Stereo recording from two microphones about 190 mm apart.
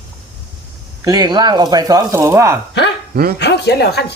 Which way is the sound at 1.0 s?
20° right (ahead or behind).